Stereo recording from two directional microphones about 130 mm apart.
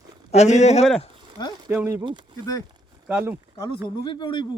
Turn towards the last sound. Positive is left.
turn(degrees=40)  # may be behind; listen again after turning